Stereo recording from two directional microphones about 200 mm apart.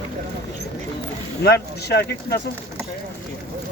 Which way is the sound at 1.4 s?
55° left (ahead or behind).